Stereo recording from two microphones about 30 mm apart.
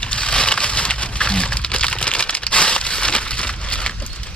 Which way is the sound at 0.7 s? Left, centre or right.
Left.